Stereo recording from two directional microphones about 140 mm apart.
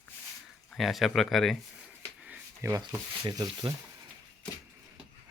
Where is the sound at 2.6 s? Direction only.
20° right (ahead or behind).